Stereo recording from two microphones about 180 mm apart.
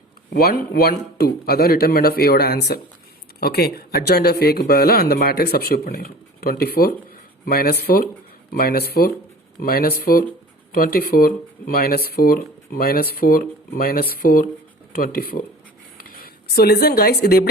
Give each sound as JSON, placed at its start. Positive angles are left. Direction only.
{"t": 0.3, "sound": "speech", "side_deg": 60}